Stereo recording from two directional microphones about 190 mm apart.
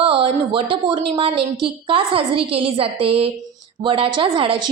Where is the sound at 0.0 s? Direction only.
30° right (ahead or behind).